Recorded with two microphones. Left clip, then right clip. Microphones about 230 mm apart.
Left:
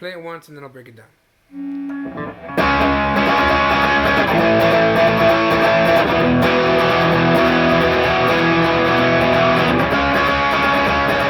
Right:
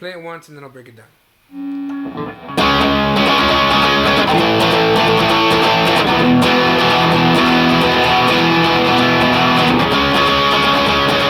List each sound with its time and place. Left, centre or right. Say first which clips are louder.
2.1 s music: right 2 dB; right